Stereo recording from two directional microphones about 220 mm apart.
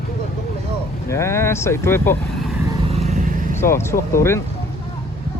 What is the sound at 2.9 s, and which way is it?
Vehicle, 30° right (ahead or behind).